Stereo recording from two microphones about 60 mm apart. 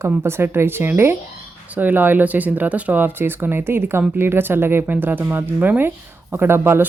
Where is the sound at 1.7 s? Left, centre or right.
Right.